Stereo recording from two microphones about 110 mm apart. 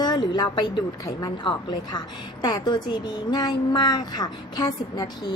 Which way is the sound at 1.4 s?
45° left (ahead or behind).